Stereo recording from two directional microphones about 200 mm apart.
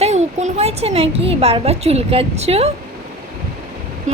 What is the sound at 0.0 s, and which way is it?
A woman's voice, 35° right (ahead or behind).